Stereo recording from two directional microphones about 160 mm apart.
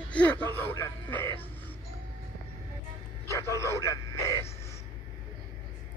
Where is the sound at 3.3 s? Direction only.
20° left (ahead or behind).